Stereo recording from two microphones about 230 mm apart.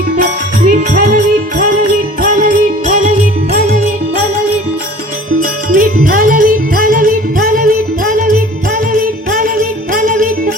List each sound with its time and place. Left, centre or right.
0.2 s music: right
5.4 s music: right